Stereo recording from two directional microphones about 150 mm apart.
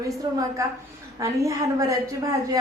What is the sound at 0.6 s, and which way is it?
A woman's voice, 20° right (ahead or behind).